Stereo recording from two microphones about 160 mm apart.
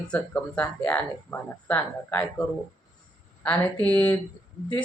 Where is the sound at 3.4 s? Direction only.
10° left (ahead or behind).